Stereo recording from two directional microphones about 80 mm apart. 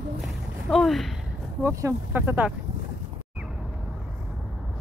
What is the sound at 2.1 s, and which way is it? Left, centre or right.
Speech, right.